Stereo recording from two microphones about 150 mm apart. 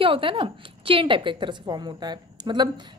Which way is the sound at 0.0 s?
35° right (ahead or behind).